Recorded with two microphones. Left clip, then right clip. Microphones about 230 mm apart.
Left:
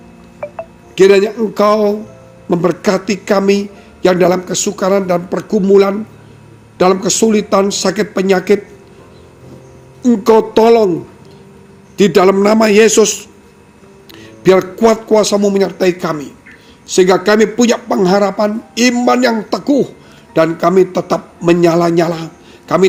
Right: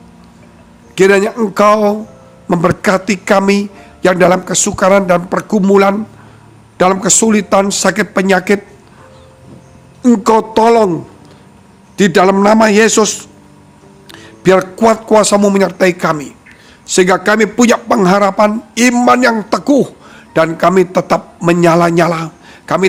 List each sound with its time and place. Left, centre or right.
0.9 s a man's voice: right
10.0 s a man's voice: right
11.9 s a man's voice: centre